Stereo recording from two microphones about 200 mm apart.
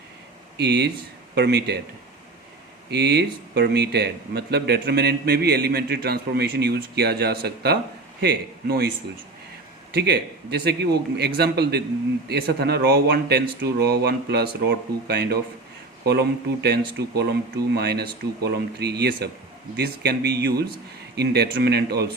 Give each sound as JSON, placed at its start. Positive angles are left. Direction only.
{"t": 0.5, "sound": "a man's voice", "side_deg": -55}
{"t": 2.9, "sound": "a man's voice", "side_deg": -55}
{"t": 9.9, "sound": "a man's voice", "side_deg": -55}